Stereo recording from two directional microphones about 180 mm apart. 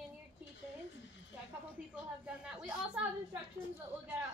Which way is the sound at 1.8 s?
5° right (ahead or behind).